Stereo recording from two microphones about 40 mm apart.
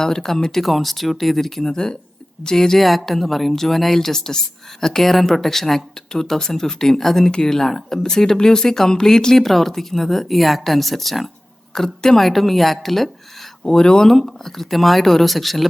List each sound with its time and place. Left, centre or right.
0.0 s speech: centre
1.7 s speech: centre
13.7 s speech: centre
14.1 s speech: centre